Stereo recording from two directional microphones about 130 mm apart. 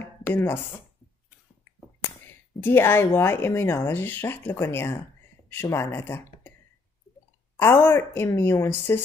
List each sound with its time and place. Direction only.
0.0 s a sound: 20° left (ahead or behind)
1.6 s speech: 20° left (ahead or behind)
7.5 s a woman's voice: 15° left (ahead or behind)